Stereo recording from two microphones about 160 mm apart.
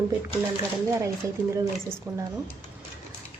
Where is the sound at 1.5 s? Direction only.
15° right (ahead or behind).